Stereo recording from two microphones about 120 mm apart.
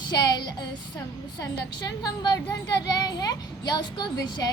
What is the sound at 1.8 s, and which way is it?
A child's voice, 35° left (ahead or behind).